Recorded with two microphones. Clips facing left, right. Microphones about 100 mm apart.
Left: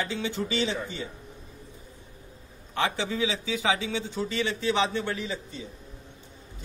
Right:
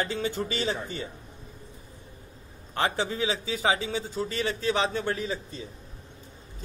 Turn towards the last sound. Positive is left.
turn(degrees=-40)  # may be behind; listen again after turning